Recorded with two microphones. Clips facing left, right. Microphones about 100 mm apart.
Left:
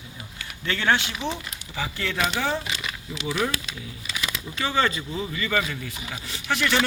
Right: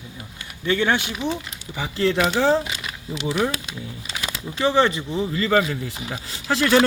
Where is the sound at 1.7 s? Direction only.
25° right (ahead or behind).